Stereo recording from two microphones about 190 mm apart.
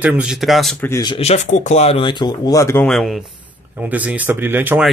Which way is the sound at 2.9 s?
Centre (ahead or behind).